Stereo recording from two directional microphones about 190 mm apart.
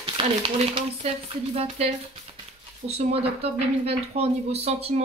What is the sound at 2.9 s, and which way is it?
A woman's voice, 30° right (ahead or behind).